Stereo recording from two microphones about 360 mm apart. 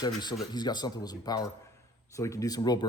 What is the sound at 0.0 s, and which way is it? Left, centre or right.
Speech, centre.